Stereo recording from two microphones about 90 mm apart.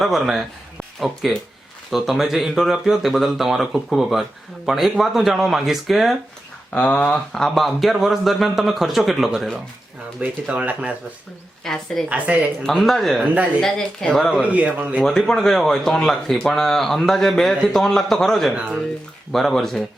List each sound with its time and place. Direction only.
0.0 s speech: 5° right (ahead or behind)
6.7 s speech: 15° left (ahead or behind)
10.2 s speech: 15° right (ahead or behind)
11.6 s speech: 5° left (ahead or behind)
12.0 s speech: 15° right (ahead or behind)
12.6 s speech: 5° left (ahead or behind)
13.2 s speech: 15° right (ahead or behind)
13.6 s speech: 5° left (ahead or behind)
14.4 s speech: 15° right (ahead or behind)
15.0 s speech: 5° left (ahead or behind)